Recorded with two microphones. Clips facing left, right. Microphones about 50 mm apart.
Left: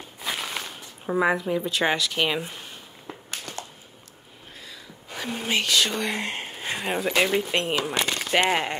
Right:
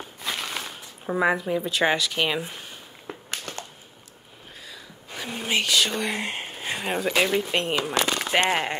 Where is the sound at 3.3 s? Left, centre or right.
Right.